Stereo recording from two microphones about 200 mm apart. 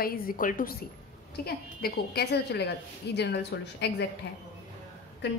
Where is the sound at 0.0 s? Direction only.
45° left (ahead or behind).